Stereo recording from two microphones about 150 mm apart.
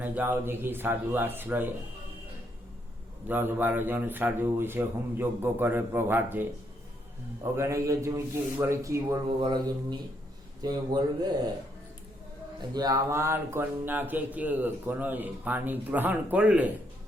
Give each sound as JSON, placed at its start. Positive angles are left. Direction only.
{"t": 0.0, "sound": "speech", "side_deg": -10}
{"t": 3.2, "sound": "speech", "side_deg": -15}
{"t": 7.5, "sound": "a man's voice", "side_deg": -20}
{"t": 9.2, "sound": "a man's voice", "side_deg": -35}
{"t": 10.6, "sound": "a man's voice", "side_deg": -25}
{"t": 12.7, "sound": "speech", "side_deg": -25}